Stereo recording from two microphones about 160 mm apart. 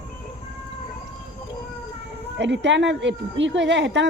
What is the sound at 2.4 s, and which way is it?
Speech, 90° right.